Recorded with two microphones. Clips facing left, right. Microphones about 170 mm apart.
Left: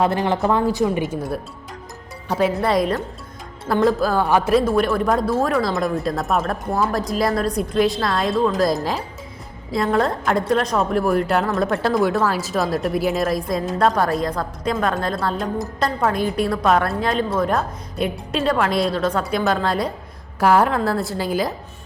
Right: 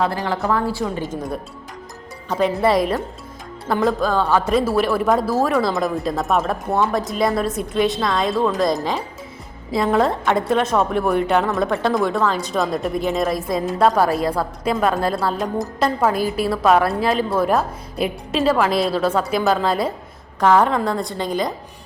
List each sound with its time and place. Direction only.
0.0 s a woman's voice: 20° left (ahead or behind)
2.3 s a woman's voice: centre (ahead or behind)
4.5 s a woman's voice: 5° right (ahead or behind)